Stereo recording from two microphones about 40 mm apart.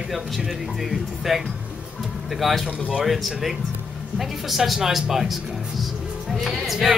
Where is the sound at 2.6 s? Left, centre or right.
Right.